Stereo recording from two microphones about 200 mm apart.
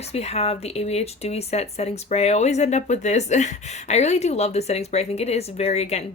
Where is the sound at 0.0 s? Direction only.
30° left (ahead or behind).